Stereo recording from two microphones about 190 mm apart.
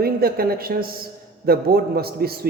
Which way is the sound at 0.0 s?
50° right (ahead or behind).